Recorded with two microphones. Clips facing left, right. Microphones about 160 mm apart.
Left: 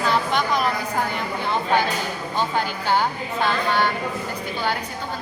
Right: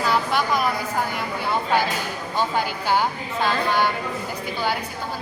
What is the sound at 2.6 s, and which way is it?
Speech, 10° right (ahead or behind).